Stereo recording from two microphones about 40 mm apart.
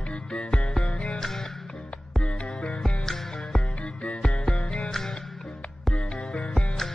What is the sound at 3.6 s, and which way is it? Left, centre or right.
Music, left.